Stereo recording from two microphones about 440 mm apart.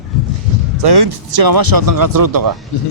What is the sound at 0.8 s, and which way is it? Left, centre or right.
Speech, right.